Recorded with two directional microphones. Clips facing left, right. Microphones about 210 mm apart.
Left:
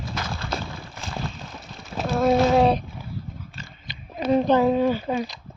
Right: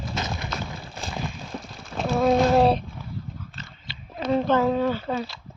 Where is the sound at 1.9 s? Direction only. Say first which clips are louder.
Even; centre (ahead or behind).